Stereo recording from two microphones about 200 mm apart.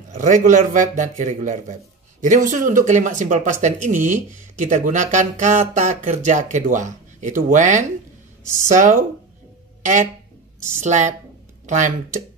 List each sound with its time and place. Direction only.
0.2 s speech: 40° right (ahead or behind)
10.8 s speech: 35° right (ahead or behind)